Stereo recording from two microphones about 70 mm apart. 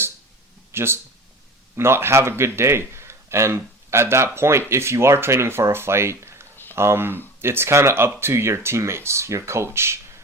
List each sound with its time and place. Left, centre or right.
0.7 s a man's voice: right